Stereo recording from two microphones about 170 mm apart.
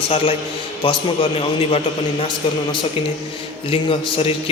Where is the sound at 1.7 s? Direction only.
35° left (ahead or behind).